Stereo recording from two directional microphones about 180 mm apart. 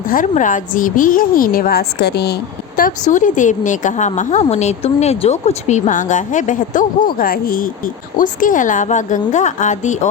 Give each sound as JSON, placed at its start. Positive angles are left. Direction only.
{"t": 0.1, "sound": "a woman's voice", "side_deg": 50}